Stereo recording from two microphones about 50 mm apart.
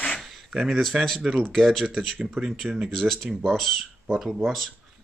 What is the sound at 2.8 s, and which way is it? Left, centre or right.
Speech, centre.